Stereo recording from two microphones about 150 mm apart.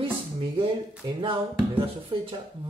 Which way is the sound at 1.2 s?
35° right (ahead or behind).